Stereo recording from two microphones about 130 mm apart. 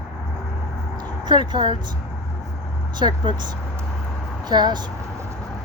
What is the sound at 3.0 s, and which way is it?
Speech, 35° right (ahead or behind).